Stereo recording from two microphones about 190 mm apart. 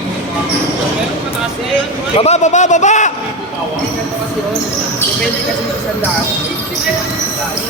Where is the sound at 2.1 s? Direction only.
35° left (ahead or behind).